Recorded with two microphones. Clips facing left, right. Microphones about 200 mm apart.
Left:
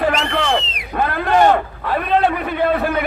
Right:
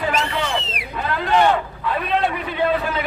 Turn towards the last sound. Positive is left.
turn(degrees=55)  # may be behind; listen again after turning